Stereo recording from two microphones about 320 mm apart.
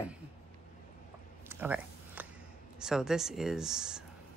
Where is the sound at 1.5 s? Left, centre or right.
Centre.